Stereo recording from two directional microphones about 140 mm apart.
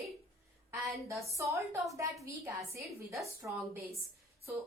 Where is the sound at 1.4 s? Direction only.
20° right (ahead or behind).